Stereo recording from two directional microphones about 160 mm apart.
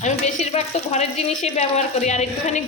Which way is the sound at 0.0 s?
45° left (ahead or behind).